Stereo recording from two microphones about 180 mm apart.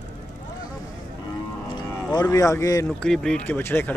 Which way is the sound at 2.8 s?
5° left (ahead or behind).